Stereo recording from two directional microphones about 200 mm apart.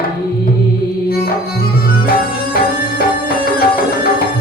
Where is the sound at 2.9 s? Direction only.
50° left (ahead or behind).